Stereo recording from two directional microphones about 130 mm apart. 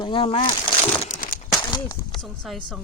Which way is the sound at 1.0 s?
90° left.